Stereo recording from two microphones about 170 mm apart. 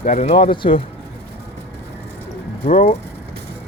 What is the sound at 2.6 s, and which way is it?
Speech, 50° left (ahead or behind).